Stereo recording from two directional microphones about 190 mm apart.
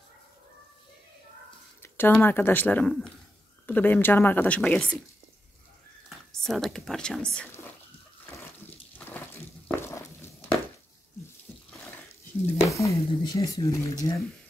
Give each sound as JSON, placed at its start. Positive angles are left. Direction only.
{"t": 1.8, "sound": "speech", "side_deg": 10}
{"t": 6.0, "sound": "speech", "side_deg": 0}
{"t": 8.9, "sound": "a sound", "side_deg": 10}
{"t": 12.6, "sound": "speech", "side_deg": 15}